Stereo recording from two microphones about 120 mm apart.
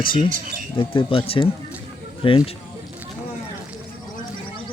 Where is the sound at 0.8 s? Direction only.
45° left (ahead or behind).